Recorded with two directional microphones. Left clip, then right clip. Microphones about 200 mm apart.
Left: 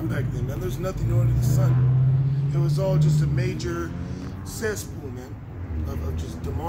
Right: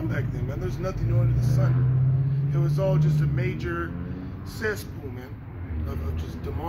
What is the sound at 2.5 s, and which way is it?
Speech, 10° left (ahead or behind).